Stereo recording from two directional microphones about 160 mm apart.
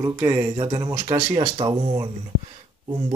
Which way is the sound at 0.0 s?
25° right (ahead or behind).